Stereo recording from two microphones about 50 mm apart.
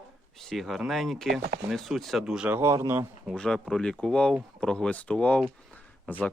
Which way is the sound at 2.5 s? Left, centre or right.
Right.